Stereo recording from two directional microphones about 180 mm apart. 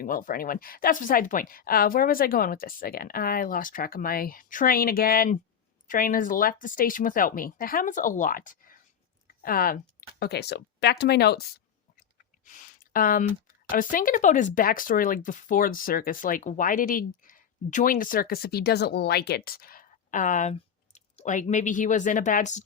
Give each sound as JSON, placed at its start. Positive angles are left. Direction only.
{"t": 0.0, "sound": "speech", "side_deg": 50}
{"t": 10.2, "sound": "speech", "side_deg": 65}
{"t": 12.5, "sound": "a sound", "side_deg": 45}
{"t": 13.9, "sound": "speech", "side_deg": 50}